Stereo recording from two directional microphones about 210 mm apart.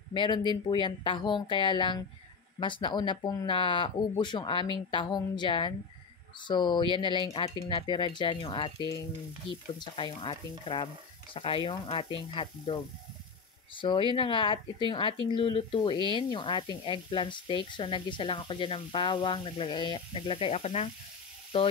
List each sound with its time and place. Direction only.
0.1 s speech: 20° left (ahead or behind)
13.7 s speech: 25° left (ahead or behind)